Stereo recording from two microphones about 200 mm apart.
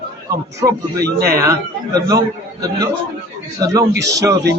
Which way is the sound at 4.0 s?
15° right (ahead or behind).